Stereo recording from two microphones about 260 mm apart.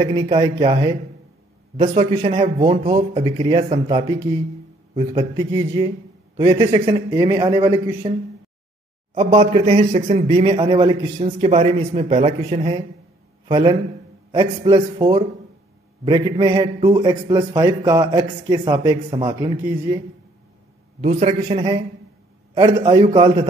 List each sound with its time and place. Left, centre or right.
0.0 s a man's voice: centre
9.1 s a man's voice: right
21.0 s speech: right